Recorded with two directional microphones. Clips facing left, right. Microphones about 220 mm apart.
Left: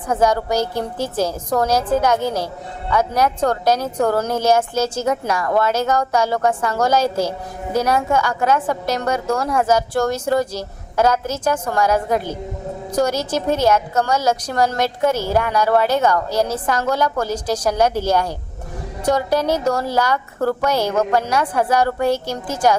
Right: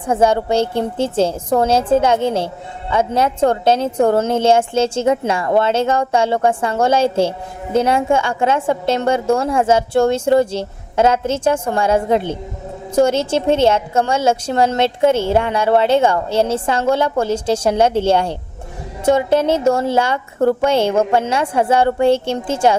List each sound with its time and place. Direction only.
0.1 s a woman's voice: 25° right (ahead or behind)